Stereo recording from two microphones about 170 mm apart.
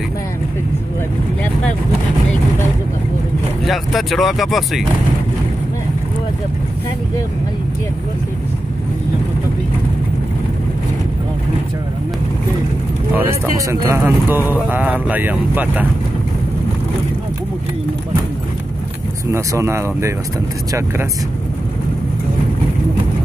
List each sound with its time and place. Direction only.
3.6 s speech: centre (ahead or behind)
13.1 s speech: 15° right (ahead or behind)
19.3 s speech: 15° right (ahead or behind)